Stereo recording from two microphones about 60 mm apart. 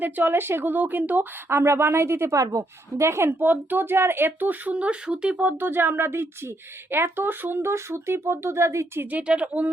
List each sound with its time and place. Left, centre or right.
0.0 s speech: right
1.5 s speech: right
2.3 s speech: right
3.4 s speech: right
4.7 s speech: centre
5.4 s speech: right
7.7 s speech: right
9.2 s speech: centre